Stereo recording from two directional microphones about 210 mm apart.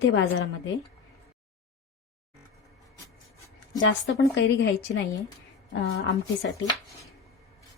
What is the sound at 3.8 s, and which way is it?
Speech, 60° left (ahead or behind).